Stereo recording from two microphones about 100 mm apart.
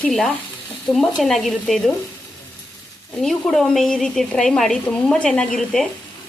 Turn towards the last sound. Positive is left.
turn(degrees=5)  # may be behind; listen again after turning